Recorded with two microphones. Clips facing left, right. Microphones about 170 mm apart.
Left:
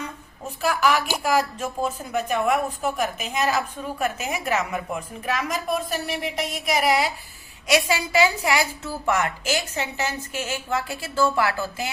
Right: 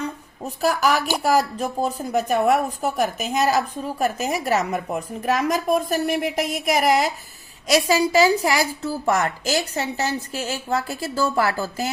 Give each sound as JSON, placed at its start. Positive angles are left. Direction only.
{"t": 0.4, "sound": "a woman's voice", "side_deg": -40}